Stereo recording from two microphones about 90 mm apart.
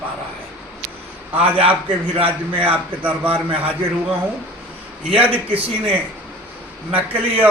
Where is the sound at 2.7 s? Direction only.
20° right (ahead or behind).